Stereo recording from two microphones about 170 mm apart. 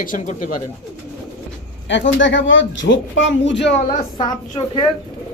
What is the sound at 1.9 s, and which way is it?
Speech, 90° left.